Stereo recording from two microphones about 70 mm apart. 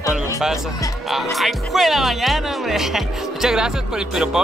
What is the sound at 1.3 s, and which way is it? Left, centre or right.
Speech, centre.